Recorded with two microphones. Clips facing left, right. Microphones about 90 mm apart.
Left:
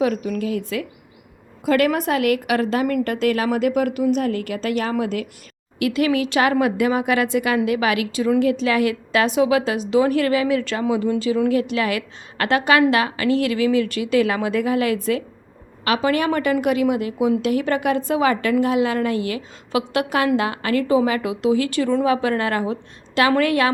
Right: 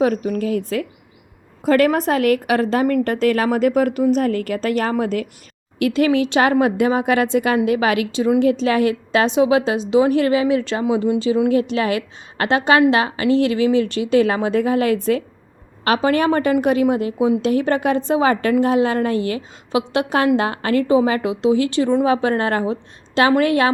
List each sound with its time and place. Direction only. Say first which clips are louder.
0.0 s a woman's voice: right 3 dB; 35° right (ahead or behind)